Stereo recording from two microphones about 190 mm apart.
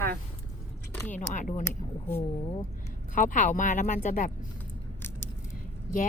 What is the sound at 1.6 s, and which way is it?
Speech, 10° left (ahead or behind).